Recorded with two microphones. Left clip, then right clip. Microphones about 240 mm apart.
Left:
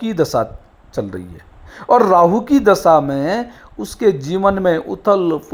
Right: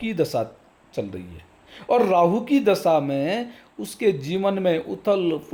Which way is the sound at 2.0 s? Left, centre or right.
Centre.